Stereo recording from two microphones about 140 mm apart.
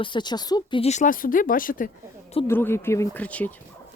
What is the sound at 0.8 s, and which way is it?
Speech, 60° left (ahead or behind).